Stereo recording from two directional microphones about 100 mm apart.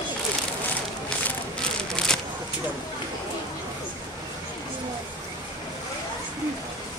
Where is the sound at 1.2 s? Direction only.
10° left (ahead or behind).